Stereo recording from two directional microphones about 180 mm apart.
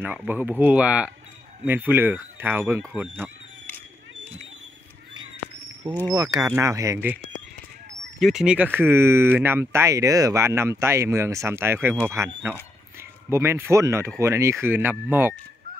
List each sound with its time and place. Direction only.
0.0 s speech: 10° right (ahead or behind)
3.6 s a sound: 10° left (ahead or behind)
6.0 s speech: 20° right (ahead or behind)
8.2 s speech: centre (ahead or behind)